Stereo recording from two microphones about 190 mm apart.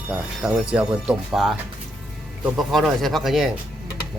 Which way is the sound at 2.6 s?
Centre (ahead or behind).